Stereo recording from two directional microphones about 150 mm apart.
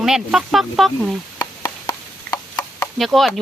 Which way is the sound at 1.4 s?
25° left (ahead or behind).